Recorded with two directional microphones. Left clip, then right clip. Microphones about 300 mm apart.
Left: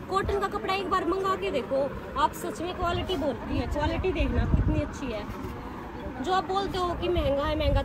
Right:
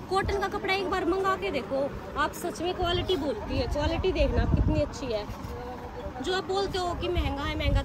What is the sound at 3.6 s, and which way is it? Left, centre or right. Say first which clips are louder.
Speech: right 1 dB; centre.